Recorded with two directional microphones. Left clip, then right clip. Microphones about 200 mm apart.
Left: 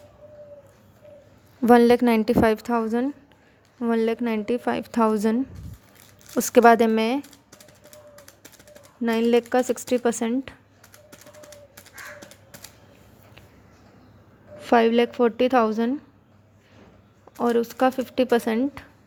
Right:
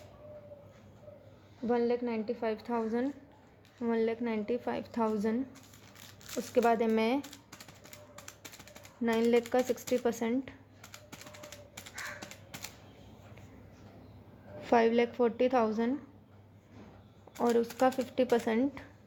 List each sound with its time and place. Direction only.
1.6 s a woman's voice: 40° left (ahead or behind)
6.5 s a woman's voice: 30° left (ahead or behind)
8.1 s a sound: 15° right (ahead or behind)
9.0 s a woman's voice: 20° left (ahead or behind)
14.7 s a woman's voice: 20° left (ahead or behind)
17.3 s a woman's voice: 20° left (ahead or behind)